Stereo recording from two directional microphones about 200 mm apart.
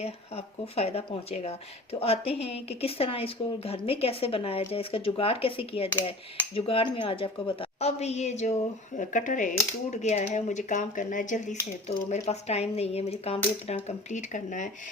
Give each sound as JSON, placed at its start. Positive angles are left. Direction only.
{"t": 0.0, "sound": "speech", "side_deg": 30}